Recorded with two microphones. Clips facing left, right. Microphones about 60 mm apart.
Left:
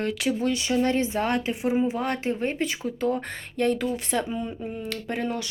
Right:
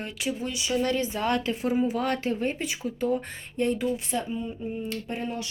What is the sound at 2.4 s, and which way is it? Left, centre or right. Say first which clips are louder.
Speech: left 2 dB; left.